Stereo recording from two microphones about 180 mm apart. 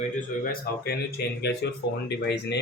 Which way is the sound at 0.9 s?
65° left (ahead or behind).